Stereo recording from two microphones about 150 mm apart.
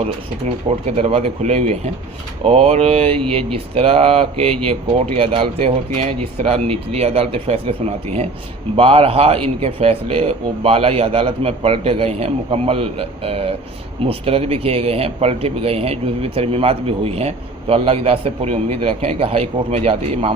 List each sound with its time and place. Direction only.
0.4 s speech: 45° right (ahead or behind)